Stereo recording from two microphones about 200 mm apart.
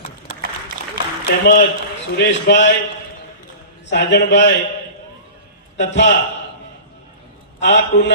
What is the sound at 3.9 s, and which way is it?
Speech, 60° left (ahead or behind).